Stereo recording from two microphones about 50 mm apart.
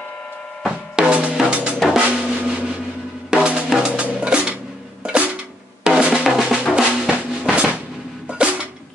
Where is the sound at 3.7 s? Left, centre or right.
Centre.